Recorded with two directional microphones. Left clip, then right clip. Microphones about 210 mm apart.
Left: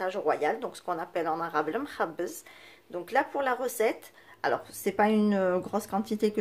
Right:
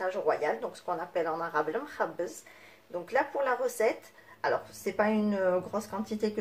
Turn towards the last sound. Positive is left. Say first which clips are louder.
# left 4 dB
turn(degrees=35)  # may be behind; listen again after turning